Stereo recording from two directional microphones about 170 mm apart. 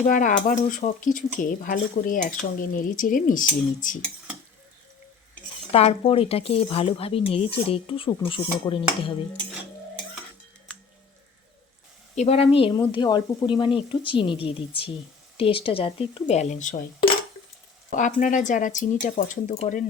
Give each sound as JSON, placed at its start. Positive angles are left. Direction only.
{"t": 0.0, "sound": "speech", "side_deg": 50}
{"t": 5.7, "sound": "speech", "side_deg": 35}
{"t": 12.1, "sound": "speech", "side_deg": 40}
{"t": 16.2, "sound": "speech", "side_deg": 45}
{"t": 17.9, "sound": "speech", "side_deg": 50}